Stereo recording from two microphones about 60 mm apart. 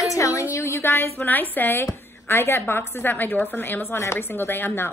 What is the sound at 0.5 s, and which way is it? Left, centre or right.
A woman's voice, left.